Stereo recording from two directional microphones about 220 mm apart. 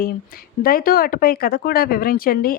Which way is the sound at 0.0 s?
40° left (ahead or behind).